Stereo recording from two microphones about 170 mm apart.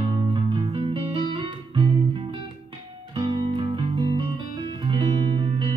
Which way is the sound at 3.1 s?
30° right (ahead or behind).